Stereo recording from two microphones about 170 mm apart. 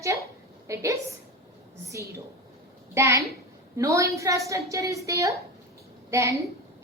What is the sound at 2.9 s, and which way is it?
A woman's voice, 15° right (ahead or behind).